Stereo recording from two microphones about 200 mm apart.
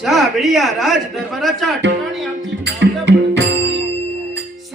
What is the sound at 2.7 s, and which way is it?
Music, 60° right (ahead or behind).